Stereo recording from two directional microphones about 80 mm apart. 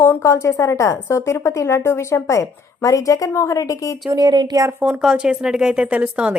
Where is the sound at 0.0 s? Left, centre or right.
Left.